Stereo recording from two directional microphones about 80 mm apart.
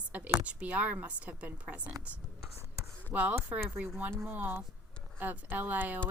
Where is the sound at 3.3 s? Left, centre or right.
Right.